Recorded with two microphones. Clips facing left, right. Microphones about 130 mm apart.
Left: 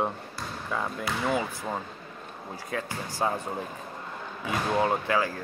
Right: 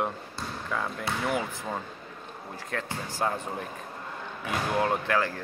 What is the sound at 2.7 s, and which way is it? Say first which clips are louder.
Speech: left 1 dB; 15° left (ahead or behind).